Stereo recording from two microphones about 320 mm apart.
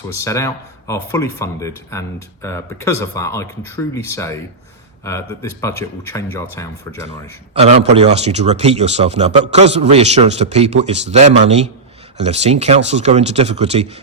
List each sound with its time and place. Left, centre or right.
0.3 s speech: centre
7.6 s speech: centre